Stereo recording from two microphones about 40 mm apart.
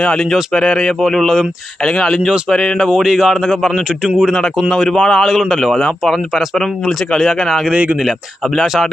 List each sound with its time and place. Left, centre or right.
0.2 s speech: centre
0.5 s a man's voice: centre
2.9 s a man's voice: centre
3.2 s speech: centre
4.9 s a man's voice: centre
5.3 s speech: centre
7.7 s speech: right